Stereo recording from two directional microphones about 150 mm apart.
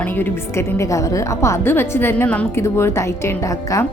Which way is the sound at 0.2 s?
20° left (ahead or behind).